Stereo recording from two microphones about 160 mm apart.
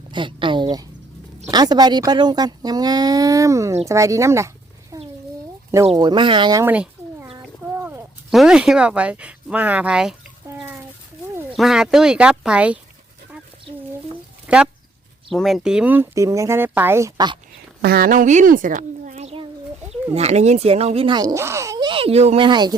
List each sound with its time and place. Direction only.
0.1 s a sound: 30° right (ahead or behind)
1.5 s speech: 25° right (ahead or behind)
6.0 s speech: 30° right (ahead or behind)
6.7 s bird: 10° right (ahead or behind)
7.7 s a sound: 15° right (ahead or behind)
8.3 s speech: 5° right (ahead or behind)
10.5 s a sound: 15° right (ahead or behind)
11.5 s speech: 5° right (ahead or behind)
14.4 s a sound: 5° right (ahead or behind)
15.3 s speech: centre (ahead or behind); by 17.3 s 20° right (ahead or behind)
17.8 s a woman's voice: 70° right (ahead or behind); by 19.3 s 55° right (ahead or behind)
20.1 s speech: 40° right (ahead or behind)
22.4 s speech: 25° right (ahead or behind)